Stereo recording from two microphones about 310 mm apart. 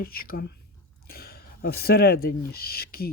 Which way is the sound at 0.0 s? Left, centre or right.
Left.